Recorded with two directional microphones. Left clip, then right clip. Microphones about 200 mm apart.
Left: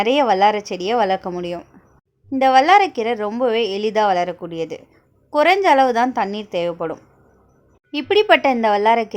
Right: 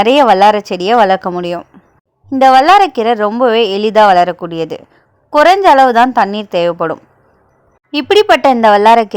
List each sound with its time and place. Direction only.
0.0 s a woman's voice: 20° right (ahead or behind)